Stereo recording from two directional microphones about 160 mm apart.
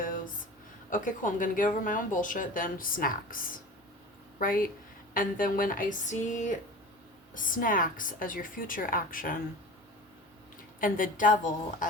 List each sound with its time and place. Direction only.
0.9 s speech: 55° left (ahead or behind)
10.8 s speech: 60° left (ahead or behind)